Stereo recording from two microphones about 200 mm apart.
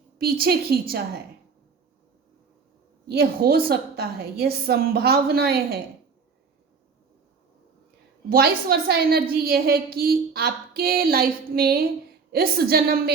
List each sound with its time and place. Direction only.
0.2 s a woman's voice: 50° right (ahead or behind)
3.1 s a woman's voice: 50° right (ahead or behind)
8.3 s a woman's voice: 50° right (ahead or behind)